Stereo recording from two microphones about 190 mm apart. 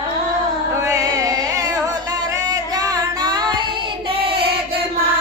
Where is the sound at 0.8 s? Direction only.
15° right (ahead or behind).